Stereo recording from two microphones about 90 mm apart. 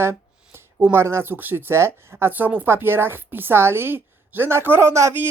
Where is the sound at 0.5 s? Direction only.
25° right (ahead or behind).